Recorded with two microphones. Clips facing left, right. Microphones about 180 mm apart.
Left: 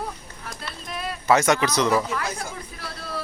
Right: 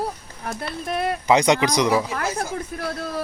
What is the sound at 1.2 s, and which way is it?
Speech, 15° right (ahead or behind).